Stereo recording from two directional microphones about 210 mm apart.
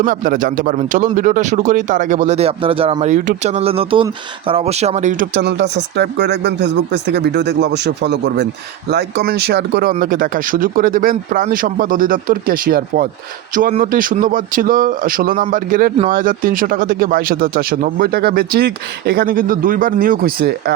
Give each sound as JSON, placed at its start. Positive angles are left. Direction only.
{"t": 0.0, "sound": "speech", "side_deg": -40}